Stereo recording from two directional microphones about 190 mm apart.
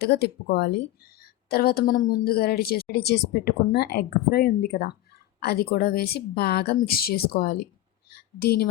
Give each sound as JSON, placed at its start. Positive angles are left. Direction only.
{"t": 0.0, "sound": "a woman's voice", "side_deg": 60}